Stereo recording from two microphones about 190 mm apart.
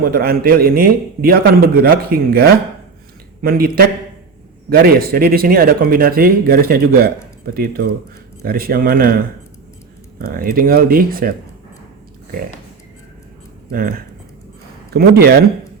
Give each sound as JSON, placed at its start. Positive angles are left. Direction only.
{"t": 0.0, "sound": "speech", "side_deg": -55}
{"t": 10.3, "sound": "speech", "side_deg": -50}
{"t": 13.7, "sound": "speech", "side_deg": -50}